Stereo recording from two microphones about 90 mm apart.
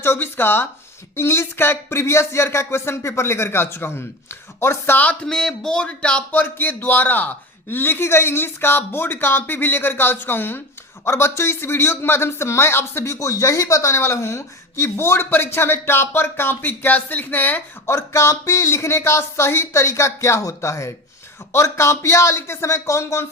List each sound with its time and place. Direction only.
0.0 s speech: 25° left (ahead or behind)
17.9 s speech: 35° left (ahead or behind)